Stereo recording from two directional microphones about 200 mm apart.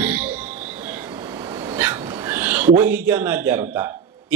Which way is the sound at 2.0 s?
20° right (ahead or behind).